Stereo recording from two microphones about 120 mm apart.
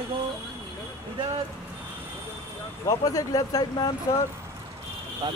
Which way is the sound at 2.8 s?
30° left (ahead or behind).